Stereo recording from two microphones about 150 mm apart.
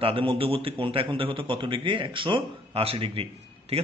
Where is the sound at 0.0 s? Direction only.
35° right (ahead or behind).